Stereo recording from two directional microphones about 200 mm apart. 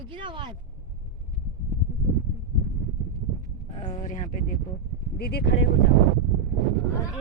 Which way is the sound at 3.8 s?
30° left (ahead or behind).